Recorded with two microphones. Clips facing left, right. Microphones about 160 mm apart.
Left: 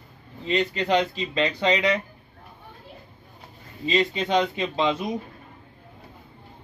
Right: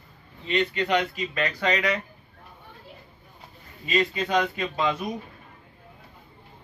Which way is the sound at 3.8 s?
25° left (ahead or behind).